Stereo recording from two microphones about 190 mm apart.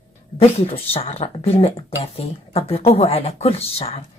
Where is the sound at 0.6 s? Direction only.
30° left (ahead or behind).